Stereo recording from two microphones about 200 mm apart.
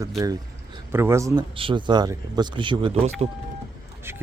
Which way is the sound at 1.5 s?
25° right (ahead or behind).